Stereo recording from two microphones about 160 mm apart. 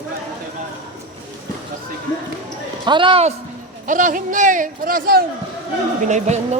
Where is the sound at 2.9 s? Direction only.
30° right (ahead or behind).